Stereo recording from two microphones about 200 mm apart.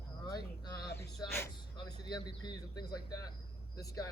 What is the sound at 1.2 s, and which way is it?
Speech, 20° left (ahead or behind).